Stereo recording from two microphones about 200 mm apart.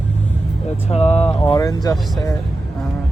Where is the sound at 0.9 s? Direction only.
35° left (ahead or behind).